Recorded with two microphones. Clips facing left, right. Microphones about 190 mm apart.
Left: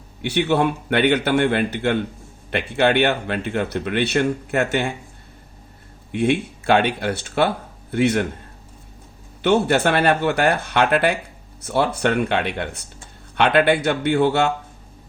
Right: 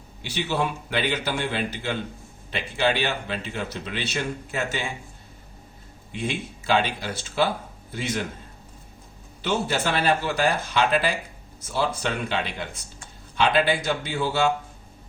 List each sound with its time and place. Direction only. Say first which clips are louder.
0.2 s a man's voice: left 8 dB; 60° left (ahead or behind)
6.1 s speech: left 10 dB; 65° left (ahead or behind)
9.4 s a man's voice: left 8 dB; 60° left (ahead or behind)